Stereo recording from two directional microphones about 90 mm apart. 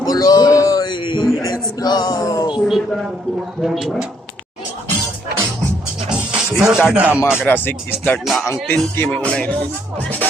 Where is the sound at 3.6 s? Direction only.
Centre (ahead or behind).